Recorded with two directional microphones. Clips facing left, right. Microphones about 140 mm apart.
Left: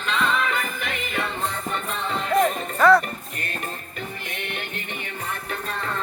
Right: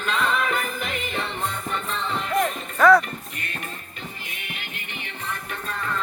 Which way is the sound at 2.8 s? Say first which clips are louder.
Right 1 dB; 5° left (ahead or behind).